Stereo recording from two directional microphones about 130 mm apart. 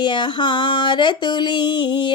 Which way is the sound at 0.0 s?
35° left (ahead or behind).